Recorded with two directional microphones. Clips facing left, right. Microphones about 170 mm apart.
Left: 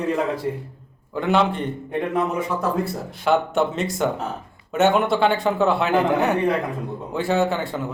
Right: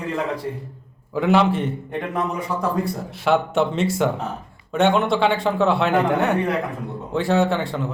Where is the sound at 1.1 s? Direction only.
Centre (ahead or behind).